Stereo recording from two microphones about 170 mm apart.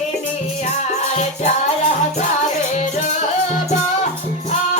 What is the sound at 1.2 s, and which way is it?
Music, 40° left (ahead or behind).